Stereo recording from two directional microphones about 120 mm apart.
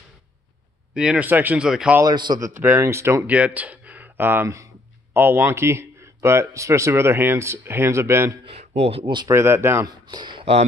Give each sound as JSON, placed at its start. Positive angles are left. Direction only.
{"t": 0.9, "sound": "speech", "side_deg": -10}
{"t": 2.0, "sound": "a man's voice", "side_deg": -35}
{"t": 2.4, "sound": "speech", "side_deg": -20}
{"t": 3.3, "sound": "speech", "side_deg": -10}
{"t": 8.5, "sound": "speech", "side_deg": -60}
{"t": 9.0, "sound": "a man's voice", "side_deg": -35}
{"t": 9.3, "sound": "speech", "side_deg": -20}
{"t": 9.8, "sound": "speech", "side_deg": -40}